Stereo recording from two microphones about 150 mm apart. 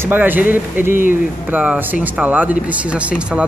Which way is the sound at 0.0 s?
10° right (ahead or behind).